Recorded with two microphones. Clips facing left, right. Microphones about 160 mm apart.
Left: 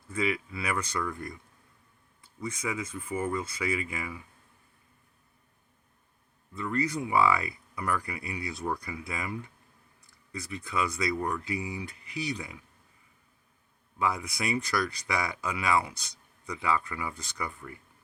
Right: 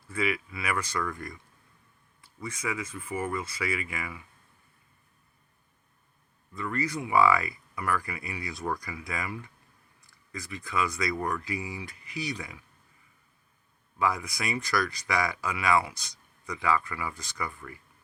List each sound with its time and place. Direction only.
0.2 s speech: 25° left (ahead or behind)
2.6 s speech: 25° left (ahead or behind)
6.5 s speech: 25° left (ahead or behind)
10.5 s speech: 25° left (ahead or behind)
14.0 s speech: 25° left (ahead or behind)